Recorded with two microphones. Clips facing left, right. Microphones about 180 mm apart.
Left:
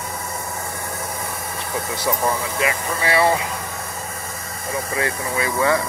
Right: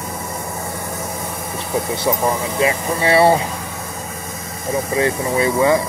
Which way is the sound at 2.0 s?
25° right (ahead or behind).